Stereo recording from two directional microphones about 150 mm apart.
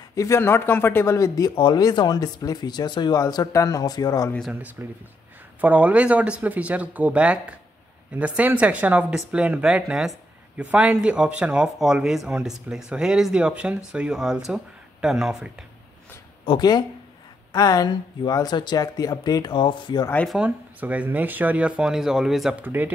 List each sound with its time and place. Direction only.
0.1 s speech: 20° left (ahead or behind)
4.8 s speech: 15° right (ahead or behind)
16.4 s speech: 30° left (ahead or behind)
20.2 s speech: 5° right (ahead or behind)